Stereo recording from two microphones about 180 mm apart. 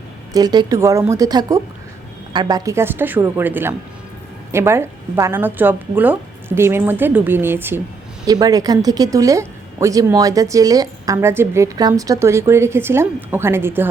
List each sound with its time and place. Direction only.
0.3 s speech: 20° right (ahead or behind)